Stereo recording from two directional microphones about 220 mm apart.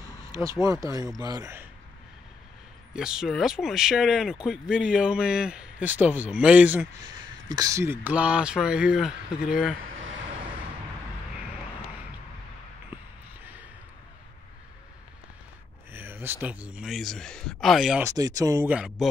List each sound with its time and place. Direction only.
0.2 s a sound: 15° right (ahead or behind)
0.6 s speech: 15° right (ahead or behind)
2.9 s speech: 5° right (ahead or behind)
15.9 s speech: 10° right (ahead or behind)
18.0 s speech: 15° right (ahead or behind)